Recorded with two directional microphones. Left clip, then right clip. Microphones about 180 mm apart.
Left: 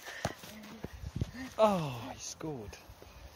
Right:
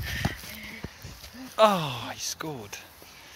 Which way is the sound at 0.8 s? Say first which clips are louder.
Right 4 dB; 30° right (ahead or behind).